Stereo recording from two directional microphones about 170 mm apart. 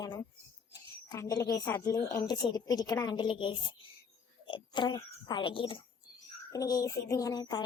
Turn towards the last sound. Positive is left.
turn(degrees=25)  # may be behind; listen again after turning